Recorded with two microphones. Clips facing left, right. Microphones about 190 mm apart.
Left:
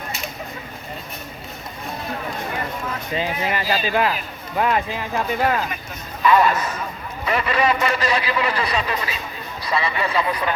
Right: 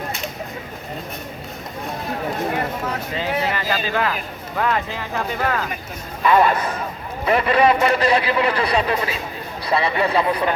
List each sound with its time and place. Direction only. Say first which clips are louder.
3.2 s speech: even; 15° left (ahead or behind)
6.2 s a man's voice: right 1 dB; 50° right (ahead or behind)